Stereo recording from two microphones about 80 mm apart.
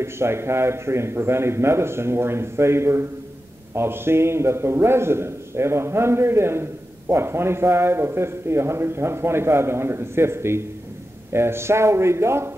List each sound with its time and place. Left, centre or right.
0.0 s a man's voice: right